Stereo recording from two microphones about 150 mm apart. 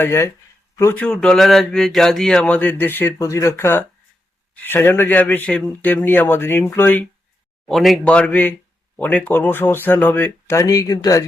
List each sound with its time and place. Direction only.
0.0 s speech: 15° left (ahead or behind)
0.9 s speech: 5° left (ahead or behind); by 11.3 s 25° left (ahead or behind)